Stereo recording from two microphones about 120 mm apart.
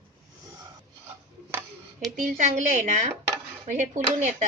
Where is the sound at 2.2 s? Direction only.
80° right.